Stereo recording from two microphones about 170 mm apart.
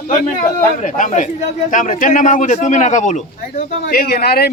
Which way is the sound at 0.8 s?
45° left (ahead or behind).